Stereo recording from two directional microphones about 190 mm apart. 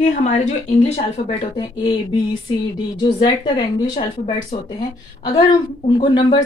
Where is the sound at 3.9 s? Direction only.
35° left (ahead or behind).